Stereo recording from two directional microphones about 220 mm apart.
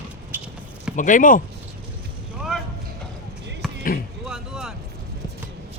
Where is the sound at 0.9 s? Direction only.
35° left (ahead or behind).